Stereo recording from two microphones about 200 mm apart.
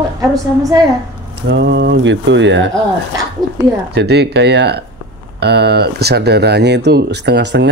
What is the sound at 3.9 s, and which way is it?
Speech, 55° right (ahead or behind).